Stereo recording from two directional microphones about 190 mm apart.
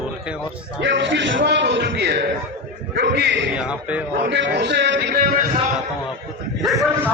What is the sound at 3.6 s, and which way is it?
Speech, 5° right (ahead or behind).